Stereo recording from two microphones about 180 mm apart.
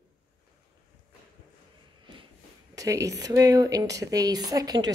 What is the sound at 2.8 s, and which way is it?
Speech, 15° right (ahead or behind).